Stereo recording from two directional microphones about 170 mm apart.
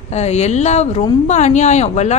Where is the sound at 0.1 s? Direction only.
40° left (ahead or behind).